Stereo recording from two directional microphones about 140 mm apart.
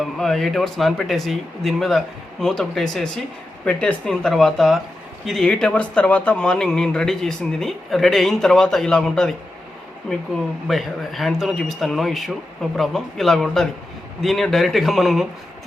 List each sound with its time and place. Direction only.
0.0 s speech: 5° left (ahead or behind)
10.7 s speech: centre (ahead or behind)